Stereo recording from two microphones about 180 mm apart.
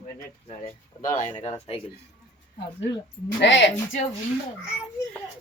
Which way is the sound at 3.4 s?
80° left.